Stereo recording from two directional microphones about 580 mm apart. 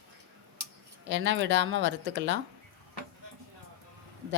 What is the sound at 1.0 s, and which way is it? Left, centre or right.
Speech, centre.